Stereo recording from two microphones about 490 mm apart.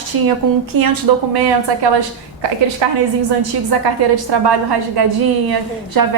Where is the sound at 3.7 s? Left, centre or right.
Right.